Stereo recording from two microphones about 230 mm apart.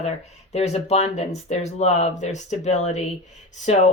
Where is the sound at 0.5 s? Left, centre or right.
Left.